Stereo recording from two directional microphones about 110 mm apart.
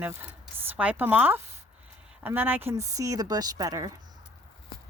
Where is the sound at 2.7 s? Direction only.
30° right (ahead or behind).